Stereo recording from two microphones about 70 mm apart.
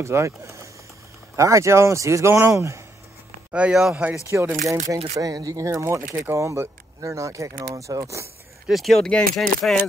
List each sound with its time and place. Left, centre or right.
0.0 s speech: right
3.5 s speech: centre
4.3 s speech: right
8.6 s speech: centre